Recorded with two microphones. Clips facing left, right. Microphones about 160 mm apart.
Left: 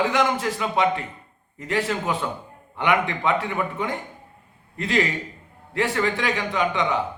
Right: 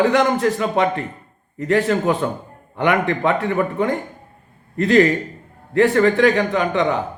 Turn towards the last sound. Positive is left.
turn(degrees=-45)  # may be behind; listen again after turning